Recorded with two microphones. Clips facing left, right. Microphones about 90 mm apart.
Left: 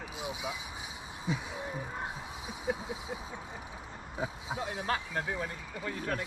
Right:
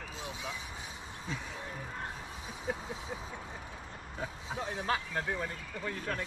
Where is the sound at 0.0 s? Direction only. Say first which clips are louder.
Left 3 dB; 15° left (ahead or behind).